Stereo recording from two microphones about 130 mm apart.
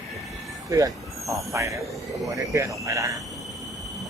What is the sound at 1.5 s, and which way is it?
Speech, 25° right (ahead or behind).